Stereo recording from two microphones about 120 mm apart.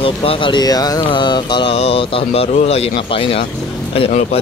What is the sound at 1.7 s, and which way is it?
Speech, 55° left (ahead or behind).